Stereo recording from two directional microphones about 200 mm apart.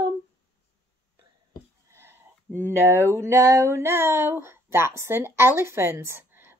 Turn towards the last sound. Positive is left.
turn(degrees=-10)  # may be behind; listen again after turning